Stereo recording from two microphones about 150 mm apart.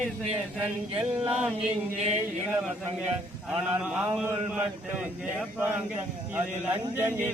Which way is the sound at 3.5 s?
10° right (ahead or behind).